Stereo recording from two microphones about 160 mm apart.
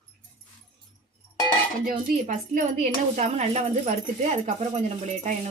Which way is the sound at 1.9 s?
55° right (ahead or behind).